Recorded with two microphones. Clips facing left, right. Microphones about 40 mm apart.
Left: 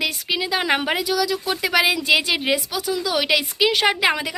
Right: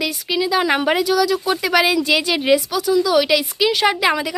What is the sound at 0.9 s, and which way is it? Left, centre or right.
Speech, centre.